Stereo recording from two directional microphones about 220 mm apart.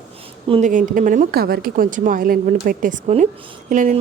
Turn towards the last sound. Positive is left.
turn(degrees=-35)  # may be behind; listen again after turning